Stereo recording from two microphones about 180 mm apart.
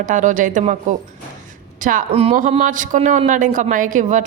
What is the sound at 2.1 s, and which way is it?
Speech, 35° right (ahead or behind).